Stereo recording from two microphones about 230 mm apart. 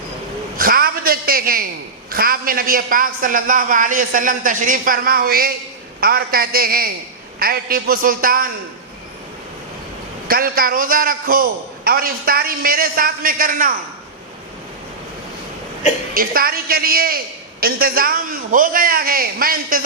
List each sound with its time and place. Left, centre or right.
0.5 s a sound: right
2.1 s a man's voice: right
10.2 s a man's voice: right
16.1 s a man's voice: right